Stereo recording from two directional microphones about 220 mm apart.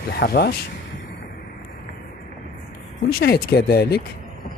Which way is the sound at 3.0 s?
45° left (ahead or behind).